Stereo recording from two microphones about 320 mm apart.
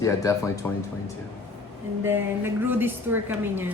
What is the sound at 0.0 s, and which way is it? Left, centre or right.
Speech, centre.